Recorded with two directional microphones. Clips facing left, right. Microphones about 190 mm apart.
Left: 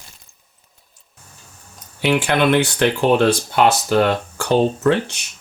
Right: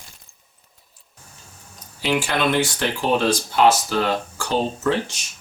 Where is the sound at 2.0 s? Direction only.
60° left (ahead or behind).